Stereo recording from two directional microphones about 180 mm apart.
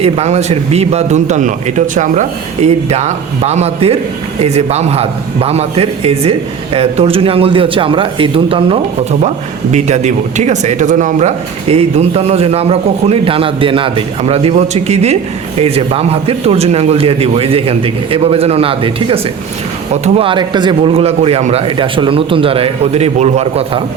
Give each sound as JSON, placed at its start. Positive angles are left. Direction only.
{"t": 0.0, "sound": "a man's voice", "side_deg": -35}